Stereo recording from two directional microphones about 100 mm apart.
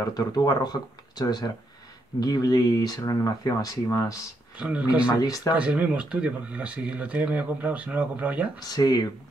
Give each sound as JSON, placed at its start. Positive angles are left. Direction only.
{"t": 0.0, "sound": "speech", "side_deg": 40}
{"t": 4.6, "sound": "speech", "side_deg": -10}
{"t": 5.1, "sound": "speech", "side_deg": 40}
{"t": 5.6, "sound": "speech", "side_deg": -15}
{"t": 8.5, "sound": "speech", "side_deg": 40}